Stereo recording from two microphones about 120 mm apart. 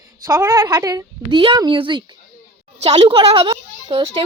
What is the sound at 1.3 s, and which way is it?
A woman's voice, 40° right (ahead or behind).